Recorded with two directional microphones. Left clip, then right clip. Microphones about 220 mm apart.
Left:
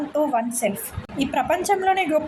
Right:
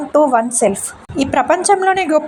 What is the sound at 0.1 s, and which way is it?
A woman's voice, 20° right (ahead or behind).